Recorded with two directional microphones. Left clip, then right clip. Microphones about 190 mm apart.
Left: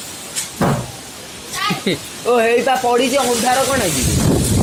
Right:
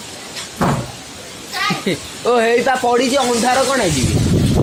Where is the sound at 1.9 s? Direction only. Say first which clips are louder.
Even; 5° left (ahead or behind).